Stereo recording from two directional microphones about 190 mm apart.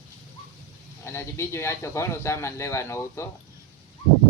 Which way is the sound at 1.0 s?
15° left (ahead or behind).